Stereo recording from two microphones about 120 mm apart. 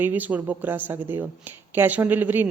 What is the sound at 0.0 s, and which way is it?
A woman's voice, 15° right (ahead or behind).